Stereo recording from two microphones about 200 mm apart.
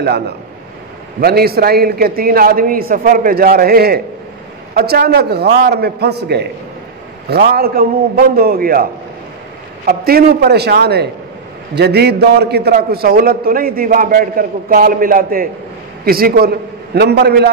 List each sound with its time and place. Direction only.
1.2 s a man's voice: 50° right (ahead or behind)
9.8 s a man's voice: 50° right (ahead or behind)